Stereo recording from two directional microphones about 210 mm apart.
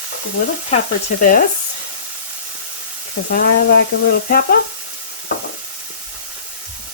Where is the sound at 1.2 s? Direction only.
40° left (ahead or behind).